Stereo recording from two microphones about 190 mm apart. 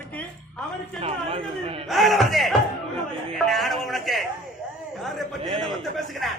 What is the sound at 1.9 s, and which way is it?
Speech, centre (ahead or behind).